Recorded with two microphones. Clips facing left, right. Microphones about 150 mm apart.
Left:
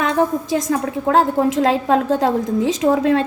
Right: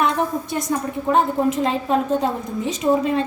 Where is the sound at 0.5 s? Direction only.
90° left.